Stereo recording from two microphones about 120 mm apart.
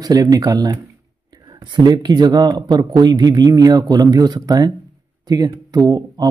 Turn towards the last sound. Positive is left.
turn(degrees=-30)  # may be behind; listen again after turning